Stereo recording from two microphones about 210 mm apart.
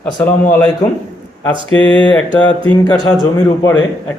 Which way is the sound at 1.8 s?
5° left (ahead or behind).